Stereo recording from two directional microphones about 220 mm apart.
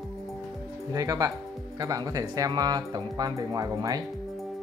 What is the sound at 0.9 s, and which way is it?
Speech, 15° right (ahead or behind).